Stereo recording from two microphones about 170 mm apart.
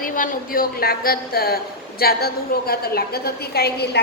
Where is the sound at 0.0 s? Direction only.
55° left (ahead or behind).